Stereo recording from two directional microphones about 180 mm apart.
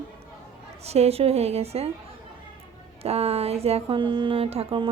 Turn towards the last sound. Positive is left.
turn(degrees=-30)  # may be behind; listen again after turning